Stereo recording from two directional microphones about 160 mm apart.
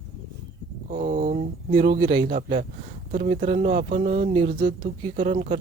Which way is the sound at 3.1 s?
55° right (ahead or behind).